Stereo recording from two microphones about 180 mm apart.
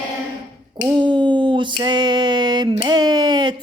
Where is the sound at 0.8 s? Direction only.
25° right (ahead or behind).